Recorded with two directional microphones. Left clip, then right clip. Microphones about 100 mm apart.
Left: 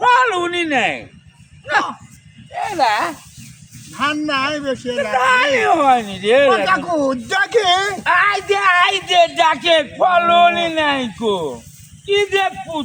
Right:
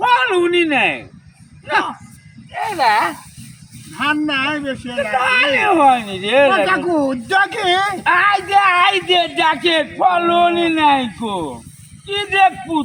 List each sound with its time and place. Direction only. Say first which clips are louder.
0.0 s a sound: even; 40° left (ahead or behind)
1.6 s speech: even; 40° left (ahead or behind)
2.5 s speech: right 1 dB; centre (ahead or behind)
3.9 s a man's voice: right 1 dB; 45° left (ahead or behind)